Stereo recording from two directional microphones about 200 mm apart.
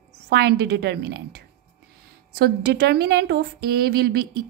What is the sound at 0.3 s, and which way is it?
A woman's voice, 55° right (ahead or behind).